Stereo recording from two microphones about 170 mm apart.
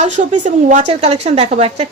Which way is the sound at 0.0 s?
45° right (ahead or behind).